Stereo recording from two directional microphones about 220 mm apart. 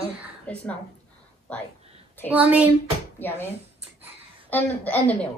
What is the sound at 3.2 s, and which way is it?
Speech, 10° left (ahead or behind).